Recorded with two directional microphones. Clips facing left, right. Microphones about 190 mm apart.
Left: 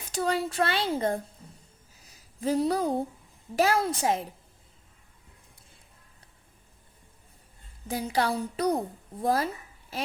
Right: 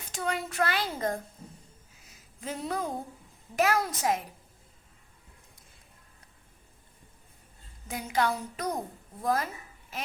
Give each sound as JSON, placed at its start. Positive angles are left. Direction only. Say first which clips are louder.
{"t": 0.1, "sound": "speech", "louder": "left 5 dB", "side_deg": 35}
{"t": 2.0, "sound": "a sound", "louder": "left 10 dB", "side_deg": 35}
{"t": 3.5, "sound": "a woman's voice", "louder": "left 2 dB", "side_deg": 30}
{"t": 7.9, "sound": "speech", "louder": "left 2 dB", "side_deg": 35}